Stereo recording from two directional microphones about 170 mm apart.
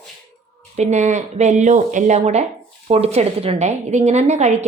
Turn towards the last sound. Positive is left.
turn(degrees=-40)  # may be behind; listen again after turning